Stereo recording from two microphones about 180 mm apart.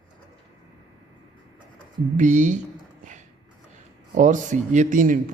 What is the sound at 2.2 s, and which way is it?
Speech, 45° right (ahead or behind).